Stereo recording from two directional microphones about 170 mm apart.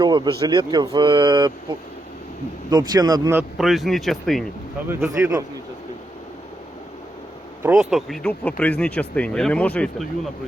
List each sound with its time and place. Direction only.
0.0 s speech: 25° right (ahead or behind)
2.6 s speech: 25° right (ahead or behind)
3.6 s speech: centre (ahead or behind)
4.9 s speech: 10° right (ahead or behind)
7.6 s speech: 5° right (ahead or behind)